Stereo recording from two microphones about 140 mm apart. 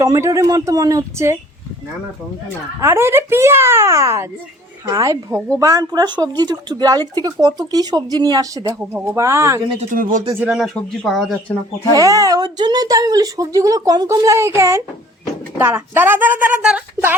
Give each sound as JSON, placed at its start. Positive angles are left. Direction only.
{"t": 0.0, "sound": "speech", "side_deg": -25}
{"t": 2.8, "sound": "a woman's voice", "side_deg": -15}
{"t": 8.9, "sound": "speech", "side_deg": -15}
{"t": 9.9, "sound": "speech", "side_deg": -70}
{"t": 10.4, "sound": "speech", "side_deg": -5}
{"t": 11.9, "sound": "a woman's voice", "side_deg": -25}